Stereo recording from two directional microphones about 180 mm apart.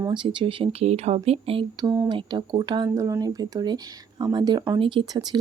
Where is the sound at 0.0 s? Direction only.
25° right (ahead or behind).